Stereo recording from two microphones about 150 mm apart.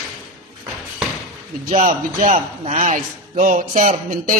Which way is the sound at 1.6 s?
60° right (ahead or behind).